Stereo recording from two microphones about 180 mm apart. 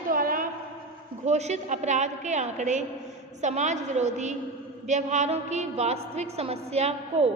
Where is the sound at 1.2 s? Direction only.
40° right (ahead or behind).